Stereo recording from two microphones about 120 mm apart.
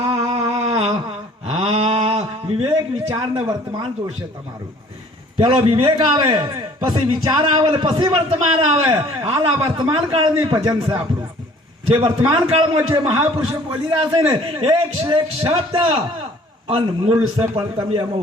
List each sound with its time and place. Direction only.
0.3 s a sound: 55° right (ahead or behind)
3.5 s speech: 40° right (ahead or behind)
5.4 s a man's voice: 50° right (ahead or behind)
6.3 s a man's voice: 40° right (ahead or behind)